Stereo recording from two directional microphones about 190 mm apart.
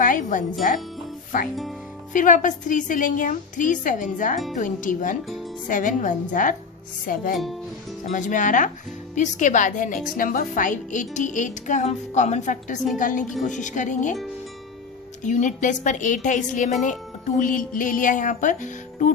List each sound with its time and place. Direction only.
0.0 s wind chime: 45° left (ahead or behind)
1.3 s a woman's voice: 45° left (ahead or behind)
15.2 s a woman's voice: 40° left (ahead or behind)